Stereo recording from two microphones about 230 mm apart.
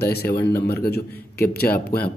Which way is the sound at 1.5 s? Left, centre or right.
Left.